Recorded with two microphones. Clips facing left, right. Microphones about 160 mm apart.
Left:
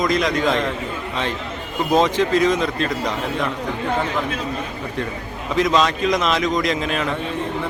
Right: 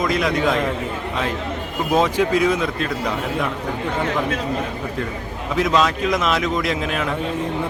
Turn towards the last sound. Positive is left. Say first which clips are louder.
# left 1 dB
turn(degrees=-5)  # may be behind; listen again after turning